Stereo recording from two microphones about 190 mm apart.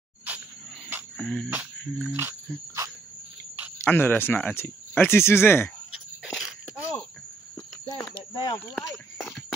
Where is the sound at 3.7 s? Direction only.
10° left (ahead or behind).